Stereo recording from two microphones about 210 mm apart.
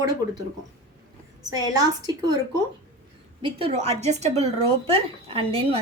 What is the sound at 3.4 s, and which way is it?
Speech, 25° right (ahead or behind).